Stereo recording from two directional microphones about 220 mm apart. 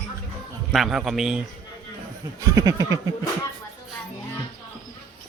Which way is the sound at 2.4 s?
15° right (ahead or behind).